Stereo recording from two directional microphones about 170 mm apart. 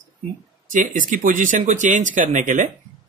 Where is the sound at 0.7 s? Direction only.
50° right (ahead or behind).